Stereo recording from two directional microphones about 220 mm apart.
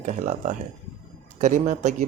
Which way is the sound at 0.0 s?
35° right (ahead or behind).